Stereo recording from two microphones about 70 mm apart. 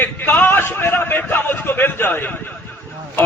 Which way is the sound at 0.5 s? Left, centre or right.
Left.